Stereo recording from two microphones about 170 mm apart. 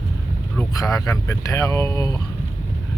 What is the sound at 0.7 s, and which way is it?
Speech, 20° left (ahead or behind).